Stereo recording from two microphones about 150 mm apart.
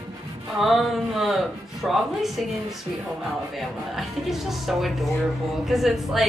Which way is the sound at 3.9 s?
Centre (ahead or behind).